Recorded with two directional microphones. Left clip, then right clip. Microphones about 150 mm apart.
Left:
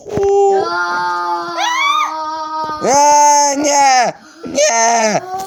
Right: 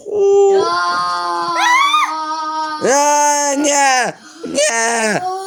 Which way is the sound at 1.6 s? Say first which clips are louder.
Right 2 dB; 45° right (ahead or behind).